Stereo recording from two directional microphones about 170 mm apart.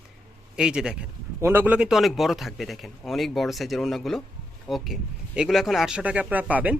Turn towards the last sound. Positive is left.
turn(degrees=-10)  # may be behind; listen again after turning